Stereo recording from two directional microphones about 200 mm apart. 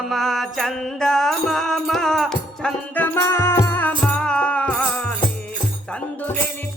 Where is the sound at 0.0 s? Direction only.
Centre (ahead or behind).